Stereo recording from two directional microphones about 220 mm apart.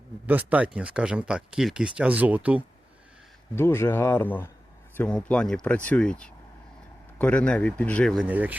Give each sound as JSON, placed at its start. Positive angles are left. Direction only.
{"t": 0.3, "sound": "speech", "side_deg": -5}
{"t": 3.5, "sound": "a man's voice", "side_deg": 10}
{"t": 8.3, "sound": "speech", "side_deg": -10}